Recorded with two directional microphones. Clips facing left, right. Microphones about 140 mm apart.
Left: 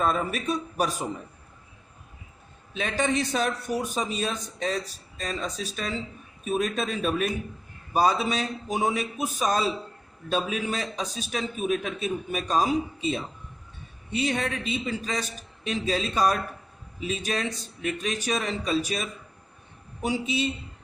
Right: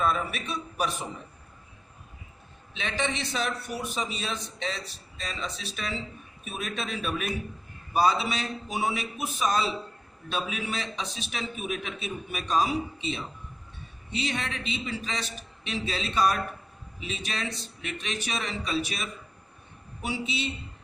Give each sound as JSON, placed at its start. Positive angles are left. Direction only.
{"t": 0.0, "sound": "a man's voice", "side_deg": 40}
{"t": 2.7, "sound": "a man's voice", "side_deg": 45}